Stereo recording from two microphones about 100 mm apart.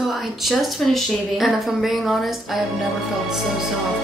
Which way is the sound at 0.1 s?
Centre (ahead or behind).